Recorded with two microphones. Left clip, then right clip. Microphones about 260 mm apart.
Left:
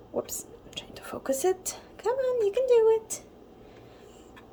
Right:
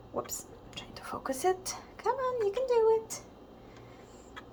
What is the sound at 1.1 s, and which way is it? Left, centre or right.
Speech, left.